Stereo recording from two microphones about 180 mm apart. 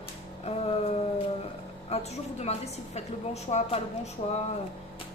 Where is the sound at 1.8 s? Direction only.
35° left (ahead or behind).